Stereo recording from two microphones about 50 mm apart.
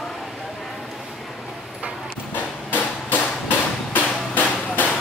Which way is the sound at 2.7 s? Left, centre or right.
Left.